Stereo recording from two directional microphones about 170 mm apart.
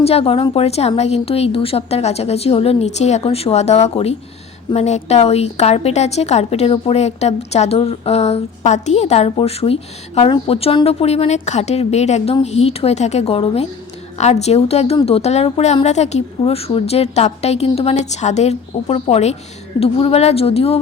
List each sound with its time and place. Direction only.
0.0 s a woman's voice: 35° left (ahead or behind)